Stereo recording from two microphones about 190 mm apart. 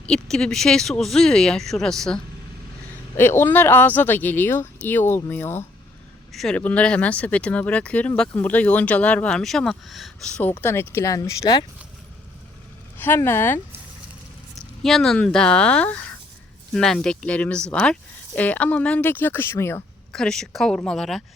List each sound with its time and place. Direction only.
0.0 s speech: 5° left (ahead or behind); by 11.6 s 20° left (ahead or behind)
13.0 s speech: 10° left (ahead or behind)
14.8 s speech: centre (ahead or behind)
20.1 s speech: 5° left (ahead or behind)